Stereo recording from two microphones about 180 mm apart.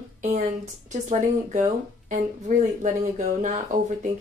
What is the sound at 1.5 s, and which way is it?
Speech, 40° right (ahead or behind).